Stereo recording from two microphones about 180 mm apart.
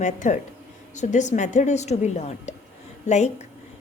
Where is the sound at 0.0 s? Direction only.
45° left (ahead or behind).